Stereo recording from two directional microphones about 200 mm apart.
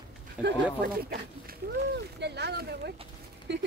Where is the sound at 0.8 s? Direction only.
50° right (ahead or behind).